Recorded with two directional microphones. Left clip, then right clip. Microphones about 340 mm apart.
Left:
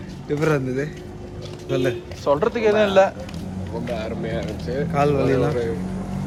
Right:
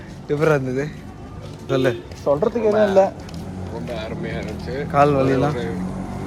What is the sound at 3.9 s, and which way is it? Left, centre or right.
Speech, centre.